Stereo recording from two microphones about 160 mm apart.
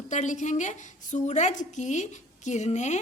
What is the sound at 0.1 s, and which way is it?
Speech, 50° left (ahead or behind).